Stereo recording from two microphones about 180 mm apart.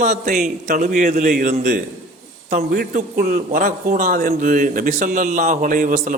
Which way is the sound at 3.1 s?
60° right (ahead or behind).